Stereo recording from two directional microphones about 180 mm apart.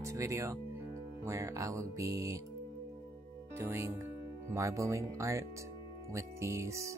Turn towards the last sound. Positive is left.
turn(degrees=-15)  # may be behind; listen again after turning